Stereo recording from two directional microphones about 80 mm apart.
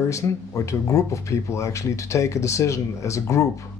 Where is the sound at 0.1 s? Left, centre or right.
Left.